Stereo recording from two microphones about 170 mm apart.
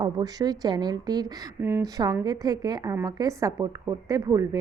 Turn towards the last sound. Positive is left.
turn(degrees=-20)  # may be behind; listen again after turning